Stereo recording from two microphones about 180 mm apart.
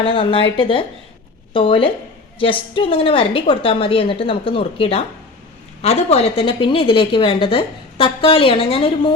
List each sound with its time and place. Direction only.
0.0 s a woman's voice: 30° left (ahead or behind)